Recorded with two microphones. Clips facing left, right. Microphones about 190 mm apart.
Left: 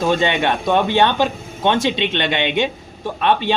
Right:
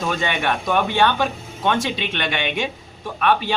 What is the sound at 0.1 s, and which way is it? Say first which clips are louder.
Speech: left 4 dB; 25° left (ahead or behind).